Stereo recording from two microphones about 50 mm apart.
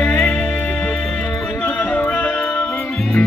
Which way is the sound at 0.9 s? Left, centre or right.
Centre.